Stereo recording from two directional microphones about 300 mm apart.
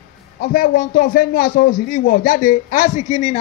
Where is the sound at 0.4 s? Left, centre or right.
Left.